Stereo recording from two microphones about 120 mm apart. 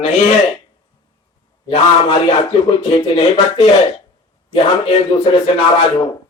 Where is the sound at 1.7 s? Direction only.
60° left (ahead or behind).